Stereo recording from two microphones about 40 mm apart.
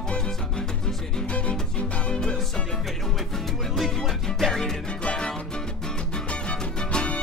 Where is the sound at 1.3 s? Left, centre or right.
Left.